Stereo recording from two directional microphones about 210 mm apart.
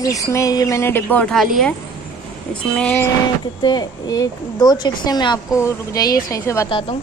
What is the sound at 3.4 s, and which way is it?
Speech, 20° left (ahead or behind).